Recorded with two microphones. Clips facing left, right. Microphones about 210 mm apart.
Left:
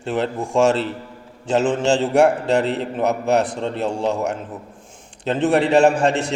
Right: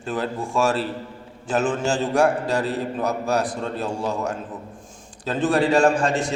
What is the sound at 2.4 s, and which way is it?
Speech, 70° left (ahead or behind).